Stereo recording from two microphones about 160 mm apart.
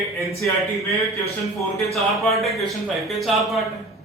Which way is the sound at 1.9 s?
Centre (ahead or behind).